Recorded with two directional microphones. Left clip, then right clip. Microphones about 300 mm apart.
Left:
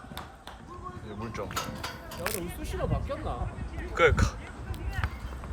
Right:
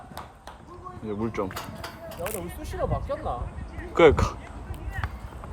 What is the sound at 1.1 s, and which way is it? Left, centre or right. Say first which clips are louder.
Speech: right 8 dB; centre.